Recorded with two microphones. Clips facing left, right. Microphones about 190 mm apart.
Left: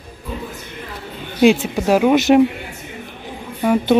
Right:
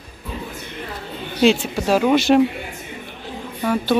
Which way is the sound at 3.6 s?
20° left (ahead or behind).